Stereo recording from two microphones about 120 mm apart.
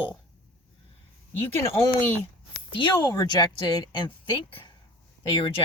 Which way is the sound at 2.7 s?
40° left (ahead or behind).